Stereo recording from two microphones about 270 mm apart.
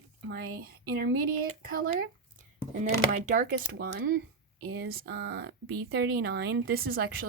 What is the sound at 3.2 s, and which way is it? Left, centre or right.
Speech, right.